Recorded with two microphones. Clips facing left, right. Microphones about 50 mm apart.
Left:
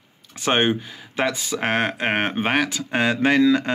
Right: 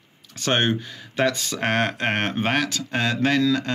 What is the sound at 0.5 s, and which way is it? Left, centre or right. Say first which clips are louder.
Speech: left 2 dB; centre.